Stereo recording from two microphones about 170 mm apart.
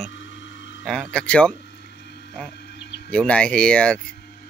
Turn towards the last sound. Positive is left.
turn(degrees=5)  # may be behind; listen again after turning